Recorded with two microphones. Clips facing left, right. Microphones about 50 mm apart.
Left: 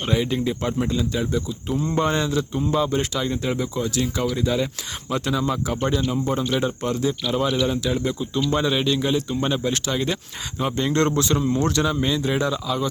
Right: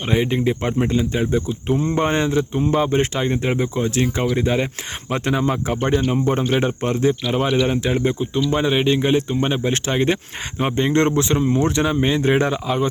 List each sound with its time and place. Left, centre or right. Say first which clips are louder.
0.1 s speech: right 4 dB; right
8.4 s speech: right 3 dB; right